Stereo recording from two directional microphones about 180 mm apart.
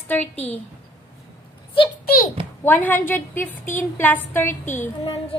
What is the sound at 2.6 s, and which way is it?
A woman's voice, 10° left (ahead or behind).